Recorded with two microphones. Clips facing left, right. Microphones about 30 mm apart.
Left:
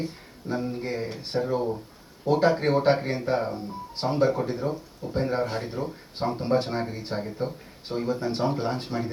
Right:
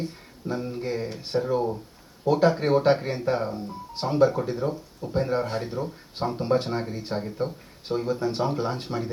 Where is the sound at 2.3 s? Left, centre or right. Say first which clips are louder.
Even; centre.